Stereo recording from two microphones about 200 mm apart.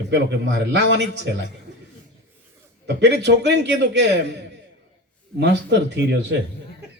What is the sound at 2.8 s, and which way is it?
A man's voice, 60° right (ahead or behind).